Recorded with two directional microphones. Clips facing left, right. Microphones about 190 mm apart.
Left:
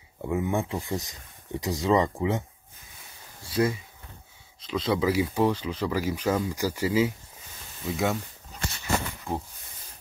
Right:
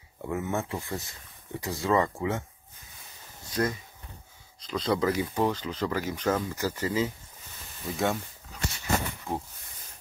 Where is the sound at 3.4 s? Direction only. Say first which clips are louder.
Left 4 dB; 10° left (ahead or behind).